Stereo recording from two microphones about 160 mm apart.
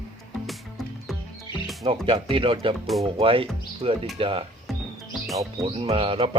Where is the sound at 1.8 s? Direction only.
35° right (ahead or behind).